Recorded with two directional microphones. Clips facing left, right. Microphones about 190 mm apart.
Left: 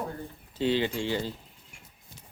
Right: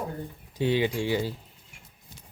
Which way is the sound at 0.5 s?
15° right (ahead or behind).